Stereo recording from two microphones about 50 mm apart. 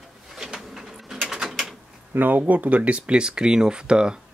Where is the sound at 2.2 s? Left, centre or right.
Right.